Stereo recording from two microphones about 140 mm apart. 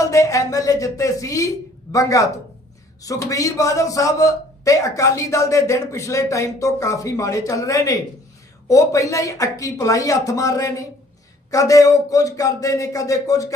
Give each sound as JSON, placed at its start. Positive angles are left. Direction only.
{"t": 0.0, "sound": "a man's voice", "side_deg": 25}